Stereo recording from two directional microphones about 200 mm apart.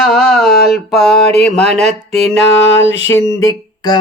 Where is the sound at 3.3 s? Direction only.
15° left (ahead or behind).